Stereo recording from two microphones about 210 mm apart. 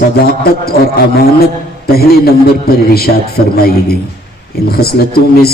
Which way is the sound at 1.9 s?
45° left (ahead or behind).